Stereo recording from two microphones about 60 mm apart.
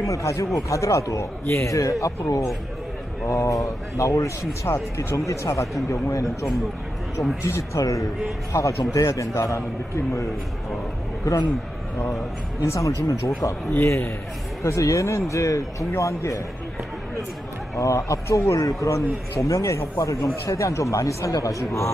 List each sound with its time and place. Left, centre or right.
0.0 s a man's voice: left
4.6 s speech: left
5.1 s a man's voice: left
7.4 s a man's voice: left
8.5 s a man's voice: left
11.3 s a man's voice: left
12.6 s a man's voice: left
13.8 s a man's voice: left
17.7 s a man's voice: left